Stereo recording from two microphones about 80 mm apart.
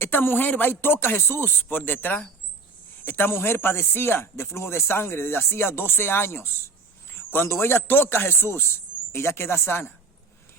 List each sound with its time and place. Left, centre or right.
0.0 s a man's voice: left